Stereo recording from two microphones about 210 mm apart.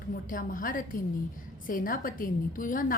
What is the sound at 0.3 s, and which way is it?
A woman's voice, 40° left (ahead or behind).